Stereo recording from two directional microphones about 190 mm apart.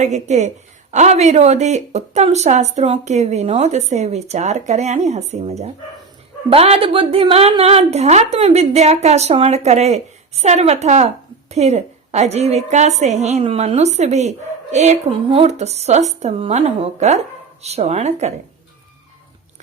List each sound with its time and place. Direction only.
0.0 s a woman's voice: 40° right (ahead or behind)